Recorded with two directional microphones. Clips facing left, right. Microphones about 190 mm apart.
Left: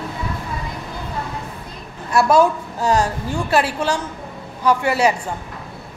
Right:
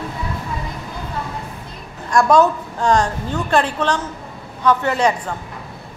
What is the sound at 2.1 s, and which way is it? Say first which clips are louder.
A woman's voice: right 1 dB; 5° left (ahead or behind).